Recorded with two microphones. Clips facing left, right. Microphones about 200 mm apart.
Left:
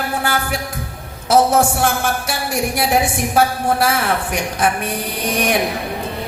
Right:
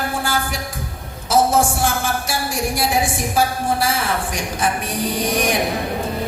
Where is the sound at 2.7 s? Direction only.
60° left (ahead or behind).